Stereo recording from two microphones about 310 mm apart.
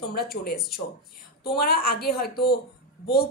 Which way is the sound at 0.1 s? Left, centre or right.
Left.